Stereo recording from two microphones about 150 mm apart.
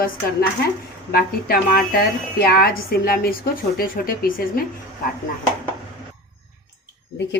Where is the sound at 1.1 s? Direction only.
85° left.